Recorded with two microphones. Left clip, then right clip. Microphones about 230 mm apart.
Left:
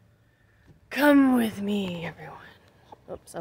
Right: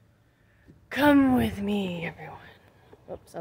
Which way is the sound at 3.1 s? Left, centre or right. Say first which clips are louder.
Left 1 dB; centre.